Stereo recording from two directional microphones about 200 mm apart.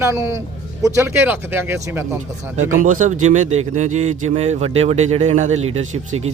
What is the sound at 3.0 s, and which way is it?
Speech, 35° right (ahead or behind).